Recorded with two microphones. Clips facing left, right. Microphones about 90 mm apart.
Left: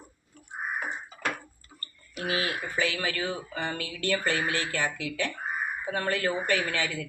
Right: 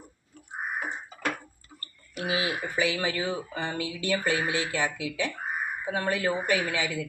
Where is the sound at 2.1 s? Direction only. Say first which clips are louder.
Right 1 dB; 10° right (ahead or behind).